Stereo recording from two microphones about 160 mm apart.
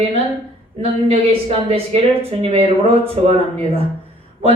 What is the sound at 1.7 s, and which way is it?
Speech, 40° right (ahead or behind).